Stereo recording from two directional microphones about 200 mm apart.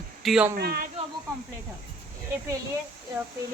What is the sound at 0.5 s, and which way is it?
Speech, 50° right (ahead or behind).